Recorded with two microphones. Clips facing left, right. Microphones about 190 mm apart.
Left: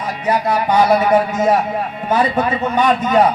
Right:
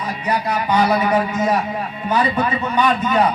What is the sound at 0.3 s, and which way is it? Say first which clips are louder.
A man's voice: left 4 dB; 50° left (ahead or behind).